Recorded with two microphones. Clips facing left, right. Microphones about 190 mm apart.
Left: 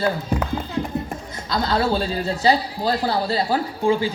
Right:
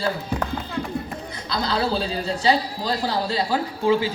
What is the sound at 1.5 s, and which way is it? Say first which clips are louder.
A man's voice: left 3 dB; 45° left (ahead or behind).